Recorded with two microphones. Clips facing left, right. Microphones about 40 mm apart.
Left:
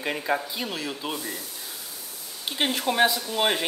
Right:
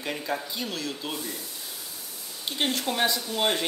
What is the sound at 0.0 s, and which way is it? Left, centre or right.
Speech, left.